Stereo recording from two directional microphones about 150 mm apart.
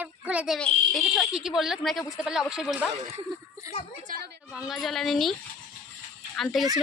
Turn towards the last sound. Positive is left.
turn(degrees=0)  # may be behind; listen again after turning